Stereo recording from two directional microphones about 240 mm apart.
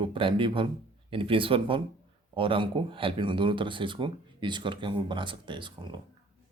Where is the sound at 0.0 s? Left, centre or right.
Right.